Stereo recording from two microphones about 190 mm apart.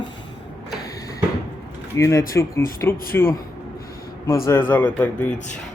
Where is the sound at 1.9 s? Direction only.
15° left (ahead or behind).